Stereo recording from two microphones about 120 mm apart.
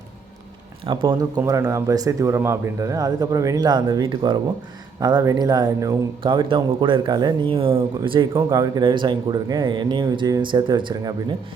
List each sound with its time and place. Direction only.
0.9 s speech: 35° right (ahead or behind)
8.4 s speech: 30° right (ahead or behind)